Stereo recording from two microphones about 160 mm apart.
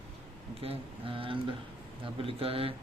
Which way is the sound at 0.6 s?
35° right (ahead or behind).